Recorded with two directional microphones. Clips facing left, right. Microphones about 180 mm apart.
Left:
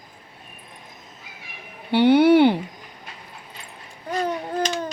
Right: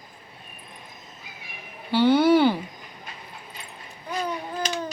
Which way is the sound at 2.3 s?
20° left (ahead or behind).